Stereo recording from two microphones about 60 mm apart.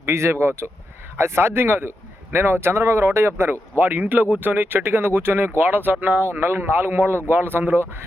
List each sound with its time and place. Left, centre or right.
0.0 s speech: right